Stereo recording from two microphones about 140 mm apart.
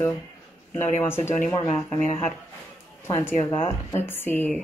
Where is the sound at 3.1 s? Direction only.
20° left (ahead or behind).